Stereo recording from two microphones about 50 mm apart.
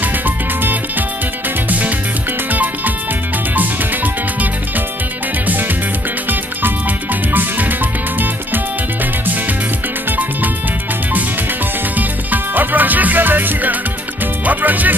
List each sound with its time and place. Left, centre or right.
2.5 s music: right
7.3 s music: right
12.0 s music: right